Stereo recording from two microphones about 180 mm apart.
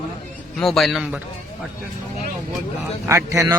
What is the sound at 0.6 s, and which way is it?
Speech, centre (ahead or behind).